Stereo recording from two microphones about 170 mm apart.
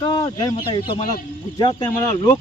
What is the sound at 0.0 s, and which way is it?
Speech, 25° left (ahead or behind).